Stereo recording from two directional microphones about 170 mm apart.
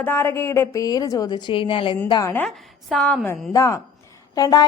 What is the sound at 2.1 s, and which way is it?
Speech, 20° left (ahead or behind).